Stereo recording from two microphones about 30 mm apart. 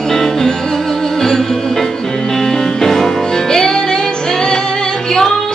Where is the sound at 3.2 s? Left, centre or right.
Centre.